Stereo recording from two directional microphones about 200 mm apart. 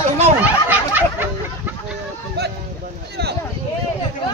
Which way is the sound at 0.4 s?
10° right (ahead or behind).